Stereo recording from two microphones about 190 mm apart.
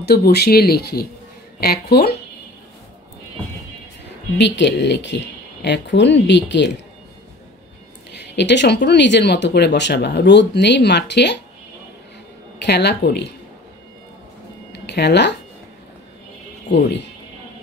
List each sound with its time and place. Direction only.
0.0 s speech: 55° left (ahead or behind)
4.4 s speech: 65° left (ahead or behind)
8.4 s speech: 65° left (ahead or behind)
12.5 s speech: 60° left (ahead or behind)
14.7 s a sound: 60° left (ahead or behind)